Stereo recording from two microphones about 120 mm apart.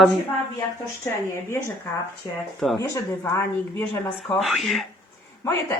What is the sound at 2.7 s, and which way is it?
A woman's voice, 25° left (ahead or behind).